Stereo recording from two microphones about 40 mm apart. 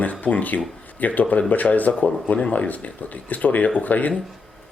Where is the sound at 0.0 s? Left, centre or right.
Left.